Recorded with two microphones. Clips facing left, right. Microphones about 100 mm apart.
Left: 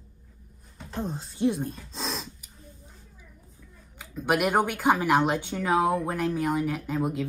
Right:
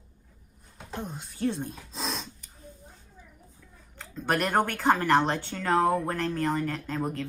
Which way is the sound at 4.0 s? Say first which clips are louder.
Left 3 dB; 10° left (ahead or behind).